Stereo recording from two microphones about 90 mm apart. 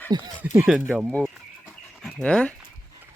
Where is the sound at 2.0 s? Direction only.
10° left (ahead or behind).